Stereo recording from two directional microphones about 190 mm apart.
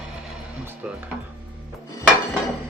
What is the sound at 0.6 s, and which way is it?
Music, 10° right (ahead or behind).